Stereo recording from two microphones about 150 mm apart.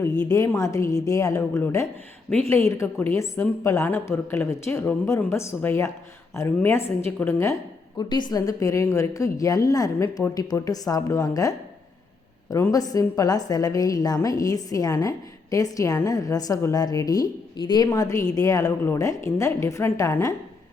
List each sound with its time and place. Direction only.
0.0 s a woman's voice: 20° left (ahead or behind)
7.9 s a woman's voice: 30° left (ahead or behind)